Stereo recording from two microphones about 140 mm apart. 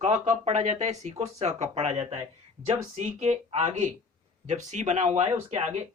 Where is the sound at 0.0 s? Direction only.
55° right (ahead or behind).